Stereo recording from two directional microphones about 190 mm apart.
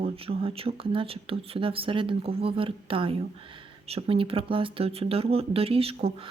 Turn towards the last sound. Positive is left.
turn(degrees=-30)  # may be behind; listen again after turning